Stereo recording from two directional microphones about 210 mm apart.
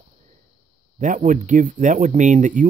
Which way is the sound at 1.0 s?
35° right (ahead or behind).